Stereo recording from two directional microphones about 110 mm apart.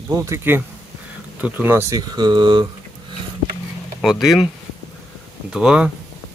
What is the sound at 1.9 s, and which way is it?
Speech, 35° right (ahead or behind).